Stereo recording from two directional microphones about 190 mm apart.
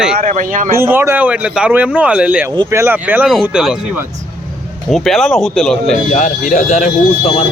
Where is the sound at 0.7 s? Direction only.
10° right (ahead or behind).